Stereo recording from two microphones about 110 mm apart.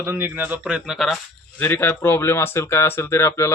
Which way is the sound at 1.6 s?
20° left (ahead or behind).